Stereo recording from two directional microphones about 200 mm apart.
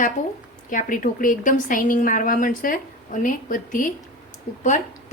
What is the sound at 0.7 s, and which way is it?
A woman's voice, 40° left (ahead or behind).